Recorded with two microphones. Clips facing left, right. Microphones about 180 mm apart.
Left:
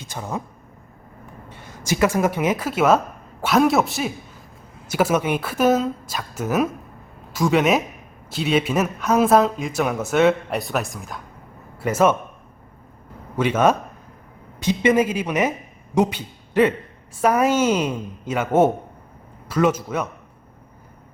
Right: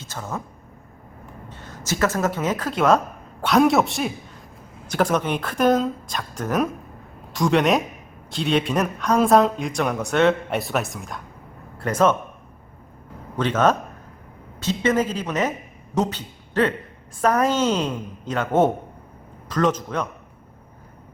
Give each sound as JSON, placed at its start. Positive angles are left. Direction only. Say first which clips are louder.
{"t": 0.0, "sound": "speech", "louder": "left 2 dB", "side_deg": 15}
{"t": 1.5, "sound": "a woman's voice", "louder": "left 3 dB", "side_deg": 10}
{"t": 13.3, "sound": "a woman's voice", "louder": "left 1 dB", "side_deg": 10}